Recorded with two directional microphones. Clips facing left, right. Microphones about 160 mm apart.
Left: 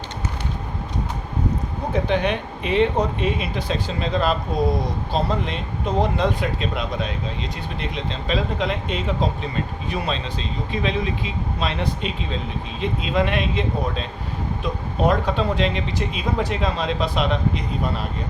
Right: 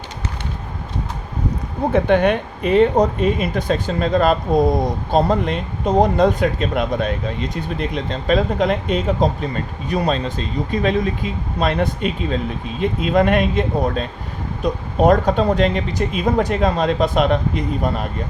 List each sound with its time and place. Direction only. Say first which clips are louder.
1.9 s speech: right 6 dB; 55° right (ahead or behind)